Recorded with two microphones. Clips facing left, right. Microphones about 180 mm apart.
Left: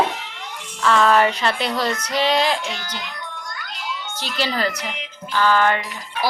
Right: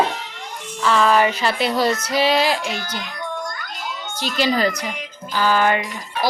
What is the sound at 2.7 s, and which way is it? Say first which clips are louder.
Music: right 3 dB; 50° right (ahead or behind).